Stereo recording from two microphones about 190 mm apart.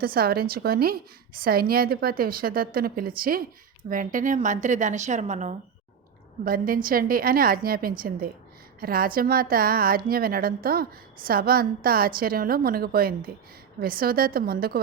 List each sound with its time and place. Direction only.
0.0 s a woman's voice: 50° right (ahead or behind)
6.4 s a woman's voice: 50° right (ahead or behind)